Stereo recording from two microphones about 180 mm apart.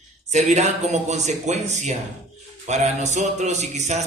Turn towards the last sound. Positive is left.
turn(degrees=-40)  # may be behind; listen again after turning